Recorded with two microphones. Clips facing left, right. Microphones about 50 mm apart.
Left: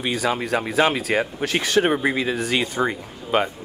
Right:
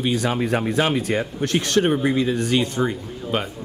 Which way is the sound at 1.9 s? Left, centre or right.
Left.